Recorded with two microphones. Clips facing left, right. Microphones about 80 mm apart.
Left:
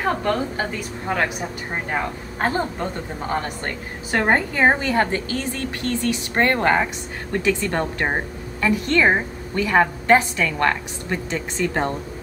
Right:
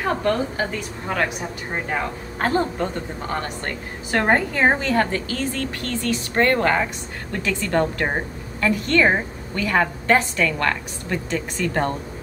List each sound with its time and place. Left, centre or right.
0.0 s a woman's voice: centre
3.6 s a woman's voice: centre